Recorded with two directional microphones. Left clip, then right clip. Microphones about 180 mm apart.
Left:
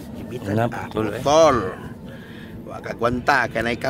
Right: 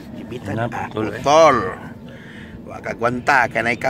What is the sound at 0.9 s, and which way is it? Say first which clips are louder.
Speech: even; 40° left (ahead or behind).